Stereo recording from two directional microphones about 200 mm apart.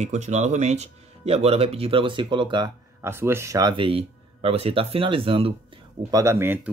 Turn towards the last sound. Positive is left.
turn(degrees=-10)  # may be behind; listen again after turning